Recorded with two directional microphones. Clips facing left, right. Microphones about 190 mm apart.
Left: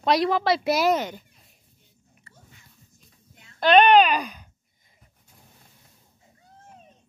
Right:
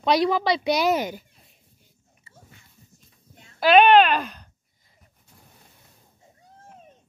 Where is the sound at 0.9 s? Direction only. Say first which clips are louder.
Even; 5° right (ahead or behind).